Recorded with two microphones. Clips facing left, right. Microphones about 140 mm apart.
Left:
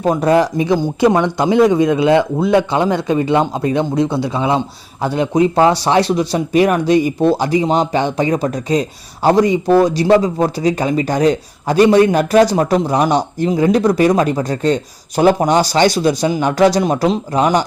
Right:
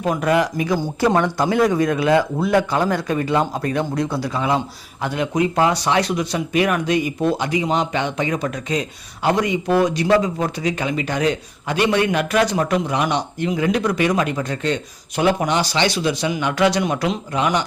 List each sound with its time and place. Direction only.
0.0 s speech: 30° left (ahead or behind)